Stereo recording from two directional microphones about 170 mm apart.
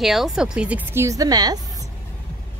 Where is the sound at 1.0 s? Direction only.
20° right (ahead or behind).